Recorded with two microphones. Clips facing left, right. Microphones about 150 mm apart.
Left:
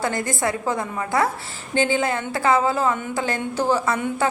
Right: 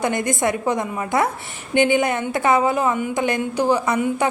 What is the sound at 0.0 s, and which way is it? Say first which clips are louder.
A woman's voice: right 3 dB; 20° right (ahead or behind).